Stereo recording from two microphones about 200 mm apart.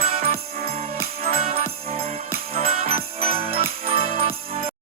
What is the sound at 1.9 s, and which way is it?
Jingle bell, 30° right (ahead or behind).